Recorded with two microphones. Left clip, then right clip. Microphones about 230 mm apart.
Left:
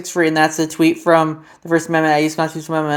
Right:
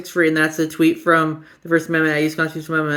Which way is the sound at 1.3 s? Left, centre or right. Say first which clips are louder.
Left 1 dB; left.